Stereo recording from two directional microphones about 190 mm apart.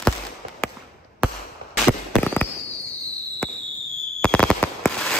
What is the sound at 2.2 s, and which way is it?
Fireworks, 10° left (ahead or behind).